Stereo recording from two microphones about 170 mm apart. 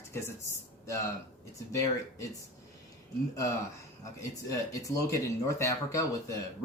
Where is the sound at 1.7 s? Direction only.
20° left (ahead or behind).